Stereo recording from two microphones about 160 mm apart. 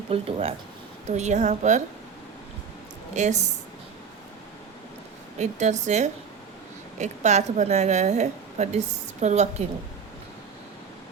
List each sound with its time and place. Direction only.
0.1 s a woman's voice: 40° right (ahead or behind)
3.2 s a woman's voice: 50° right (ahead or behind)
5.4 s a woman's voice: 45° right (ahead or behind)